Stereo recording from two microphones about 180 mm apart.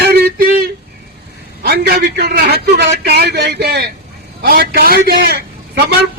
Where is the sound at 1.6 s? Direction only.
60° right (ahead or behind).